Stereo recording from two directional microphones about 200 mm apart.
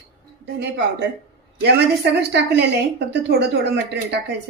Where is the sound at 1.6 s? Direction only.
55° right (ahead or behind).